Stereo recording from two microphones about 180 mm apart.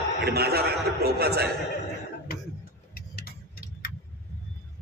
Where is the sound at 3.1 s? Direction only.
55° left (ahead or behind).